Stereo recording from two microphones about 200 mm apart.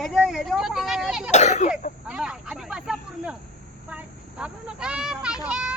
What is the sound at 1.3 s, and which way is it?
Speech, 35° left (ahead or behind).